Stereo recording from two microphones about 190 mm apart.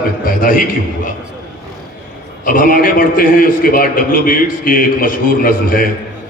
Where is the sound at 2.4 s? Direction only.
45° left (ahead or behind).